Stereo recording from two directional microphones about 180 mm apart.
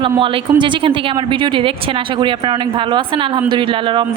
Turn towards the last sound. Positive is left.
turn(degrees=-30)  # may be behind; listen again after turning